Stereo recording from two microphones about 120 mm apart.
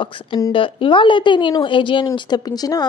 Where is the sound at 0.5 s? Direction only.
45° left (ahead or behind).